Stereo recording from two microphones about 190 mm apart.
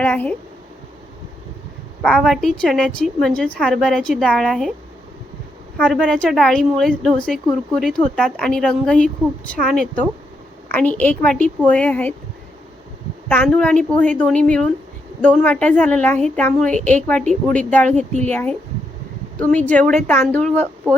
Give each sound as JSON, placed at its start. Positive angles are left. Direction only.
{"t": 0.0, "sound": "a woman's voice", "side_deg": 10}
{"t": 2.0, "sound": "a woman's voice", "side_deg": 0}
{"t": 5.7, "sound": "a woman's voice", "side_deg": 5}
{"t": 13.2, "sound": "a woman's voice", "side_deg": 10}
{"t": 17.9, "sound": "speech", "side_deg": -35}
{"t": 18.3, "sound": "a woman's voice", "side_deg": 10}